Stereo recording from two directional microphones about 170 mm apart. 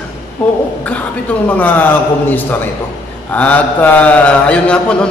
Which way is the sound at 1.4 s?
10° left (ahead or behind).